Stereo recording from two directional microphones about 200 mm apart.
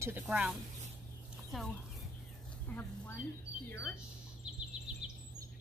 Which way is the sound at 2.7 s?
10° left (ahead or behind).